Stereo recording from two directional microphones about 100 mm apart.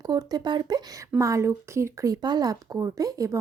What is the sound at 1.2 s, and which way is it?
A woman's voice, 30° right (ahead or behind).